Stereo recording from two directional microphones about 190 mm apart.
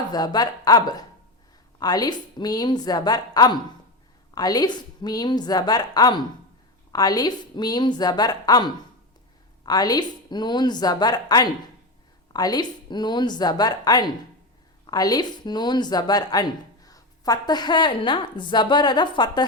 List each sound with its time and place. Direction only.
0.1 s speech: 20° left (ahead or behind)